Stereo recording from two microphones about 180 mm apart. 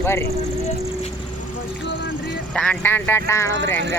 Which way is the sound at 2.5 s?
5° left (ahead or behind).